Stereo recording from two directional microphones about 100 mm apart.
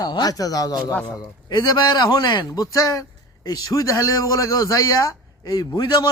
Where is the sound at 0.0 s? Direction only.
40° left (ahead or behind).